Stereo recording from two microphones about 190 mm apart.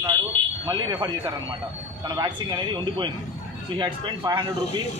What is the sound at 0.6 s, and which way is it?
Speech, 20° right (ahead or behind).